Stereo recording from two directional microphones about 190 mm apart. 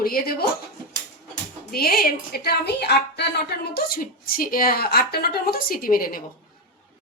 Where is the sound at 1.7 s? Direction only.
55° left (ahead or behind).